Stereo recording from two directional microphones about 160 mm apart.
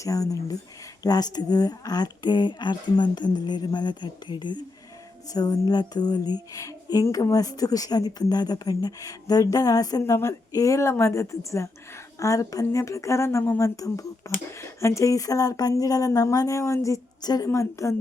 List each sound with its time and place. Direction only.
0.0 s speech: 20° left (ahead or behind)